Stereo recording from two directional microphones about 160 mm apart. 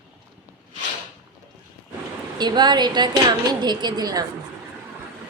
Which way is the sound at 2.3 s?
25° right (ahead or behind).